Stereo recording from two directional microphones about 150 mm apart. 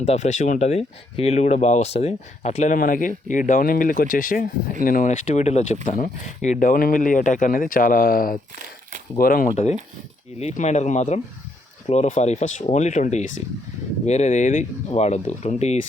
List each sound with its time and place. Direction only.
0.0 s speech: 50° left (ahead or behind); by 9.5 s 75° left (ahead or behind)
10.4 s speech: 50° left (ahead or behind)